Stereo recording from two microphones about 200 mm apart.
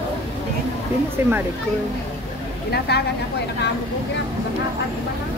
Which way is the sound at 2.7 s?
55° left (ahead or behind).